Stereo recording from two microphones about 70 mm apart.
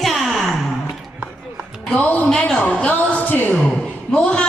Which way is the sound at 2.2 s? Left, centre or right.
Centre.